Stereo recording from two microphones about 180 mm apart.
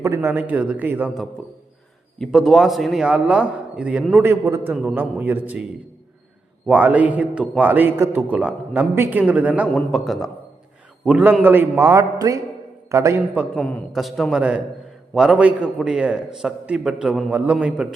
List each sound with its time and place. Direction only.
0.0 s a man's voice: 15° right (ahead or behind)
4.7 s a man's voice: centre (ahead or behind)
6.7 s a man's voice: 10° right (ahead or behind)
13.6 s a man's voice: 10° left (ahead or behind)